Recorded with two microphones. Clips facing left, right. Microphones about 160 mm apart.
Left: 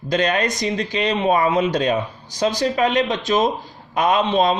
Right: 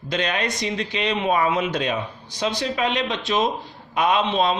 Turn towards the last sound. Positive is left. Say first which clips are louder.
# left 3 dB
turn(degrees=40)  # may be behind; listen again after turning